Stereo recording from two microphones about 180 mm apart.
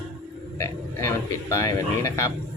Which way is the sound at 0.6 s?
15° left (ahead or behind).